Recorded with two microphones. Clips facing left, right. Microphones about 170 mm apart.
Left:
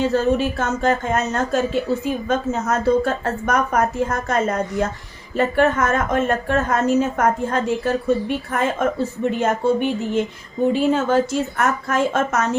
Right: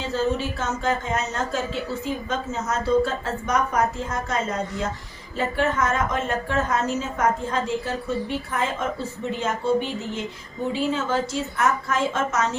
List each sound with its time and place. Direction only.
0.0 s a woman's voice: 55° left (ahead or behind)